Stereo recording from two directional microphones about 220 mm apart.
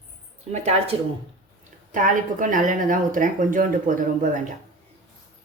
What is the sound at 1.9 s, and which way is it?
A woman's voice, 35° right (ahead or behind).